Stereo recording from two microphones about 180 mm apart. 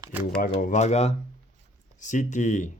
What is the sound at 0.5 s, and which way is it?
Speech, 40° left (ahead or behind).